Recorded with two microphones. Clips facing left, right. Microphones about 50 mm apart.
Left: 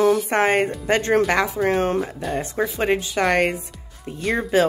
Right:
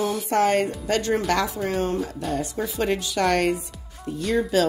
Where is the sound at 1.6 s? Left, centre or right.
Left.